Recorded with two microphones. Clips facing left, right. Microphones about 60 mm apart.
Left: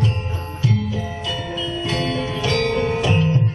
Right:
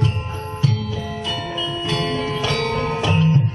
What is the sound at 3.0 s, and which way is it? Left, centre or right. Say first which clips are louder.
Music: right 1 dB; left.